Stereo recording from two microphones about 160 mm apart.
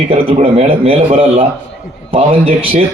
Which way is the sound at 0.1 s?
35° right (ahead or behind).